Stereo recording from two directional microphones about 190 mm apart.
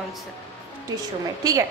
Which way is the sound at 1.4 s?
20° right (ahead or behind).